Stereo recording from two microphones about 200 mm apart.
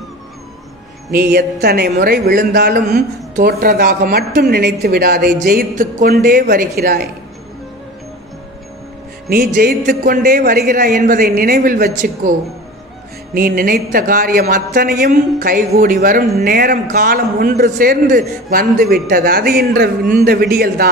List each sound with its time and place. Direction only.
1.1 s speech: 55° right (ahead or behind)
9.3 s speech: 45° right (ahead or behind)